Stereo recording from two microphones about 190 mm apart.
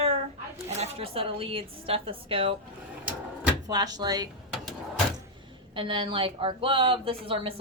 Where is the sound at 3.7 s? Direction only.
20° right (ahead or behind).